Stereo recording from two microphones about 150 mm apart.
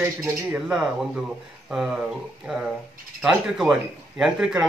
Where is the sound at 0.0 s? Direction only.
20° right (ahead or behind).